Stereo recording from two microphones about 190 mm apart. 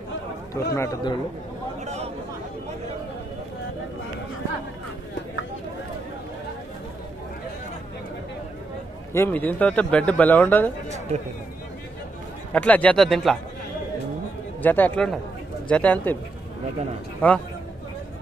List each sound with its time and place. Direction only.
0.6 s speech: 20° left (ahead or behind)
9.1 s speech: 10° left (ahead or behind)
12.5 s speech: 5° left (ahead or behind)
14.6 s speech: 10° left (ahead or behind)
17.2 s speech: 10° left (ahead or behind)